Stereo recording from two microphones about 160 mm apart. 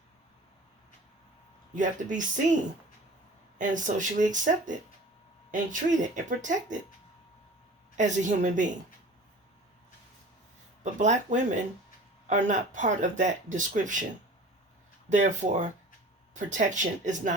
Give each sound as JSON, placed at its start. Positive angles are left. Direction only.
{"t": 1.7, "sound": "speech", "side_deg": -55}
{"t": 3.6, "sound": "speech", "side_deg": -50}
{"t": 7.9, "sound": "speech", "side_deg": -50}
{"t": 10.8, "sound": "speech", "side_deg": -50}
{"t": 15.1, "sound": "speech", "side_deg": -50}